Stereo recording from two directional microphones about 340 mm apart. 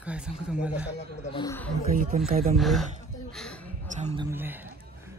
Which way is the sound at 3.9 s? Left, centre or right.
Centre.